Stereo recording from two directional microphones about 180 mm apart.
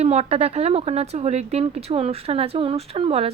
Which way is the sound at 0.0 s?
35° right (ahead or behind).